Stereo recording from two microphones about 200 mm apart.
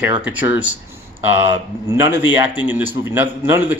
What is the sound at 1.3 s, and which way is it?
Speech, 70° left (ahead or behind).